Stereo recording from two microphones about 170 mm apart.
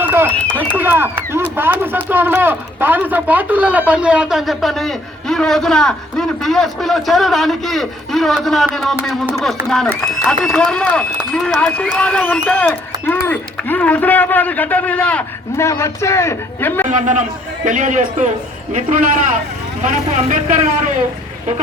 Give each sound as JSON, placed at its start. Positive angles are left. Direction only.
{"t": 0.0, "sound": "a sound", "side_deg": -15}
{"t": 0.8, "sound": "a man's voice", "side_deg": -10}
{"t": 16.9, "sound": "speech", "side_deg": -45}